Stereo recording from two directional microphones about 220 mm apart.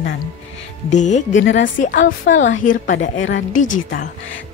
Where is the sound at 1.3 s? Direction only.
55° left (ahead or behind).